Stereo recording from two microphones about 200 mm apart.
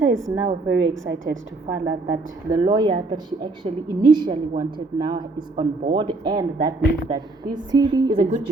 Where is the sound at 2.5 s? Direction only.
20° right (ahead or behind).